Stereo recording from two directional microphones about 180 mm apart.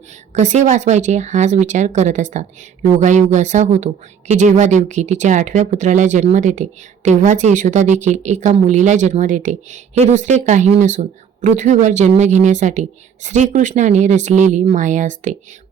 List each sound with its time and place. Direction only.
0.3 s speech: 40° right (ahead or behind)